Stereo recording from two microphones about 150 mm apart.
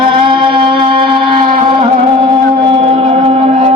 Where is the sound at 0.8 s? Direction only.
35° right (ahead or behind).